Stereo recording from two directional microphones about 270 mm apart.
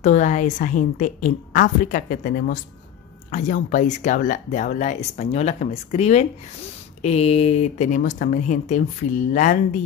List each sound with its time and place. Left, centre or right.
0.0 s speech: left